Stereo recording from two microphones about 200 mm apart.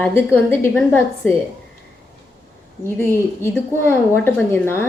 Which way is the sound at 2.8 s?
10° left (ahead or behind).